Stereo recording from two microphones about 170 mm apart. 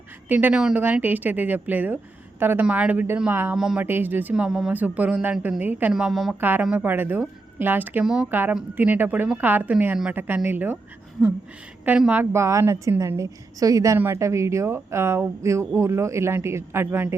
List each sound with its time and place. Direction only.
0.3 s speech: 10° right (ahead or behind)
11.9 s speech: 10° right (ahead or behind)